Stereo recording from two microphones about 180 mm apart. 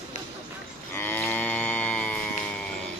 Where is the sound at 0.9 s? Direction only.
10° left (ahead or behind).